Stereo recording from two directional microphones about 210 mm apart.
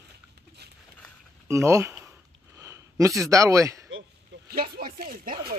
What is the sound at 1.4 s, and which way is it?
Speech, 15° right (ahead or behind).